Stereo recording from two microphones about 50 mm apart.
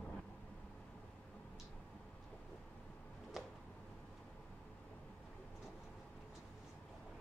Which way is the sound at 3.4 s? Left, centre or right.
Centre.